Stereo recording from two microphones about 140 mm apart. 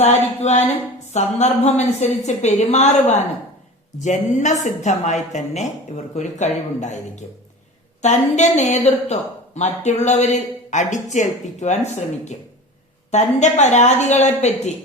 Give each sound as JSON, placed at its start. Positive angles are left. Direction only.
{"t": 0.0, "sound": "a woman's voice", "side_deg": 50}